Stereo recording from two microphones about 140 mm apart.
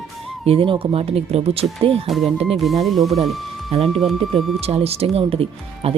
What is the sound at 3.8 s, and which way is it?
Speech, centre (ahead or behind).